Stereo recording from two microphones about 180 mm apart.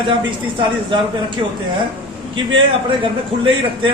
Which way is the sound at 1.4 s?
25° right (ahead or behind).